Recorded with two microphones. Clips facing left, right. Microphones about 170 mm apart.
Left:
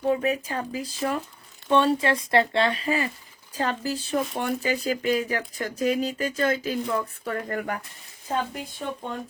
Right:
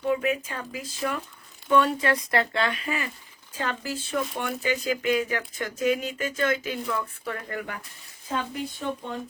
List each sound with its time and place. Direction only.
0.0 s speech: 35° left (ahead or behind)